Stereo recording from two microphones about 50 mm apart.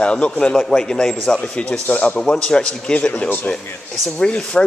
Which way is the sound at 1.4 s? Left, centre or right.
Left.